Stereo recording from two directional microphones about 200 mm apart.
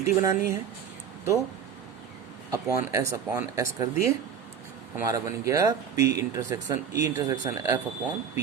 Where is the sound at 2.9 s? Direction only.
15° right (ahead or behind).